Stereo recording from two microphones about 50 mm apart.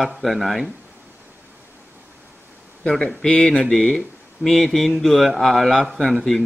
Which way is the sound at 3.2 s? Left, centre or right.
Centre.